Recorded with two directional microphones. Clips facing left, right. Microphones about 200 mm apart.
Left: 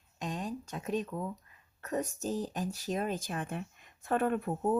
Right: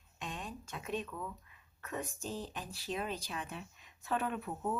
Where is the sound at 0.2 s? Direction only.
40° left (ahead or behind).